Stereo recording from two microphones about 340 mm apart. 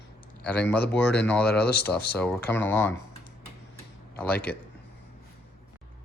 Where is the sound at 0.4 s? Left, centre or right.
Centre.